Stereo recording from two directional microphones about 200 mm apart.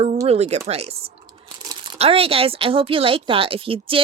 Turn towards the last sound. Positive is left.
turn(degrees=-25)  # may be behind; listen again after turning